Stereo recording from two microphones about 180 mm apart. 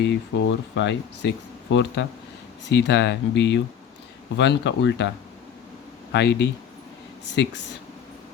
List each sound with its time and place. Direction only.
0.0 s speech: 85° left